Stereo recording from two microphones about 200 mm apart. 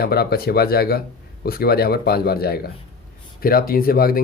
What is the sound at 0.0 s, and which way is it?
Speech, 50° left (ahead or behind).